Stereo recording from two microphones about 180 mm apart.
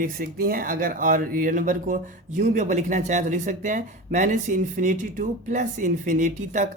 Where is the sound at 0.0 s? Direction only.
55° right (ahead or behind).